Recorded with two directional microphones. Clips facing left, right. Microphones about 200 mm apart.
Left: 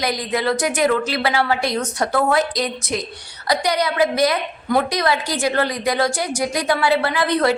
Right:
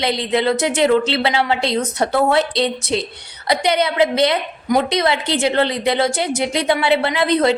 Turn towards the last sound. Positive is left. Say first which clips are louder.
# right 2 dB
turn(degrees=-20)  # may be behind; listen again after turning